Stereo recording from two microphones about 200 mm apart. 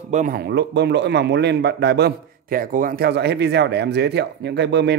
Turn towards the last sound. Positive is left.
turn(degrees=-60)  # may be behind; listen again after turning